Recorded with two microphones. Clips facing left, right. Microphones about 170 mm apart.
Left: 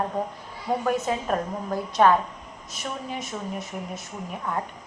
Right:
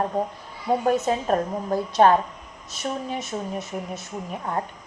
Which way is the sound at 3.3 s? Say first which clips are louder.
Right 5 dB; 30° right (ahead or behind).